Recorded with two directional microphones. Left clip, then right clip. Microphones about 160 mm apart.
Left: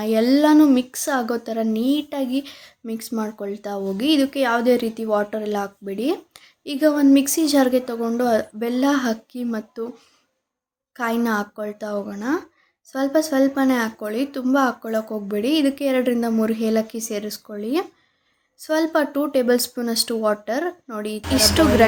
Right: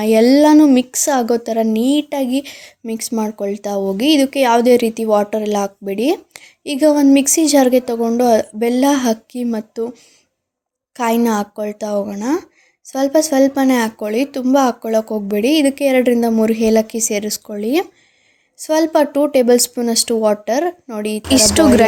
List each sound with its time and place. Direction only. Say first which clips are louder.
0.0 s speech: right 7 dB; 40° right (ahead or behind)